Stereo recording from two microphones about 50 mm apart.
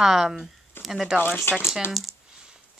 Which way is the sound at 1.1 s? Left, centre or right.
Left.